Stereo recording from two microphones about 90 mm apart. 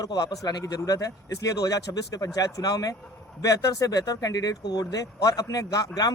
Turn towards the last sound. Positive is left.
turn(degrees=40)  # may be behind; listen again after turning